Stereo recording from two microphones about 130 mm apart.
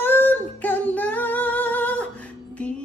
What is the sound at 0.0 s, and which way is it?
Singing, 15° left (ahead or behind).